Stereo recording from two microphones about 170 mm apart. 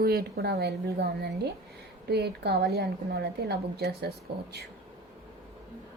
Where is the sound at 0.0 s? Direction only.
65° right (ahead or behind).